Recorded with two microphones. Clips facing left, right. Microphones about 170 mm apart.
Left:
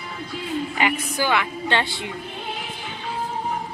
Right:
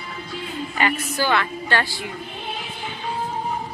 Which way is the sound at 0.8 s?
15° left (ahead or behind).